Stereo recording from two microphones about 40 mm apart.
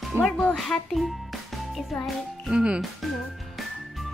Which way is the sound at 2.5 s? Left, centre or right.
Right.